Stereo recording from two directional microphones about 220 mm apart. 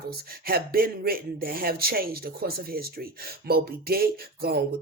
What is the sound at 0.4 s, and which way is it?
A man's voice, 40° right (ahead or behind).